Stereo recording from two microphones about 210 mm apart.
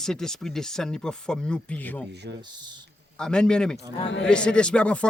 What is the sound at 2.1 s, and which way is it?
Speech, 50° right (ahead or behind).